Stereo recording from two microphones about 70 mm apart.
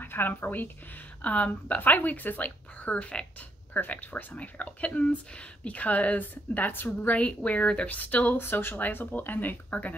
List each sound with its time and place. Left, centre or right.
0.0 s a woman's voice: left